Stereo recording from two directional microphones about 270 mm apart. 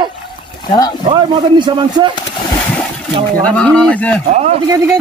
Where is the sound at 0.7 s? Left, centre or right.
Centre.